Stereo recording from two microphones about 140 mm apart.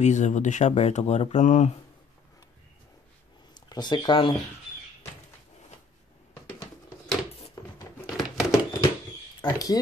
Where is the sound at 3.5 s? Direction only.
30° left (ahead or behind).